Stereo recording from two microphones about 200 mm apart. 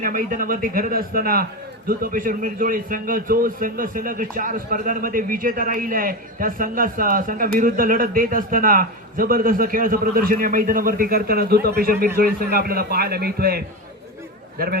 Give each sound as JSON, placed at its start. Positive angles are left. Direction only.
{"t": 0.0, "sound": "a man's voice", "side_deg": -40}